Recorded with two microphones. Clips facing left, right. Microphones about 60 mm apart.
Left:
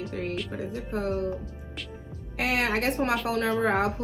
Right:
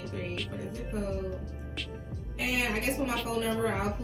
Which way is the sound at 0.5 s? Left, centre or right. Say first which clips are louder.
Left 4 dB; left.